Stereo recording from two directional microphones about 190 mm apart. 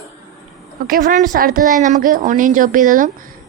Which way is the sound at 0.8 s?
50° right (ahead or behind).